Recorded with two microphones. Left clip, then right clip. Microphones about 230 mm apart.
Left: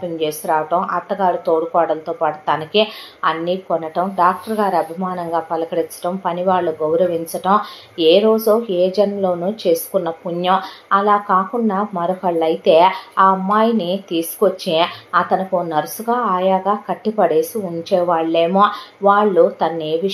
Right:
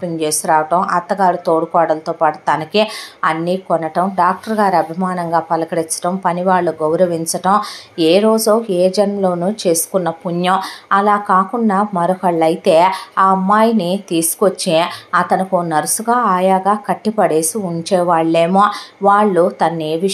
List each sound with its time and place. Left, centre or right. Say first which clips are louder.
0.2 s a woman's voice: right 4 dB; right